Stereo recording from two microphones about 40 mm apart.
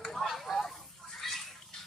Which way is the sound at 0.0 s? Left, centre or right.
Centre.